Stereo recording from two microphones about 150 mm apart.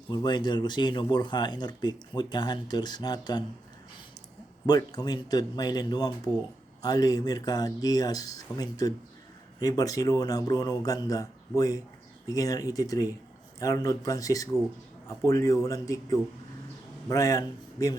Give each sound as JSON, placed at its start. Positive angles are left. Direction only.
{"t": 0.1, "sound": "speech", "side_deg": 30}
{"t": 4.6, "sound": "speech", "side_deg": 25}